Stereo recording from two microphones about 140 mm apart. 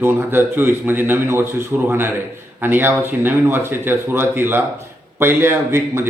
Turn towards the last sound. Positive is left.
turn(degrees=-15)  # may be behind; listen again after turning